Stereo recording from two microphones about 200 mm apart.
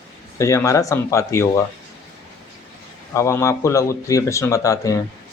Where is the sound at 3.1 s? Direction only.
15° left (ahead or behind).